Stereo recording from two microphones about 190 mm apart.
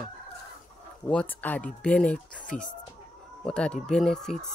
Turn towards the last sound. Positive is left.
turn(degrees=0)  # may be behind; listen again after turning